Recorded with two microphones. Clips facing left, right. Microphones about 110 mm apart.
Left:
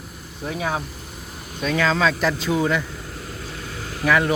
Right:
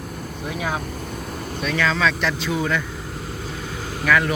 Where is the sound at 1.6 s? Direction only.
30° left (ahead or behind).